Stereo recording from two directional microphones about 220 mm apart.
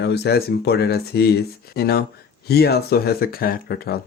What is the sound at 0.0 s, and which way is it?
Speech, 50° left (ahead or behind).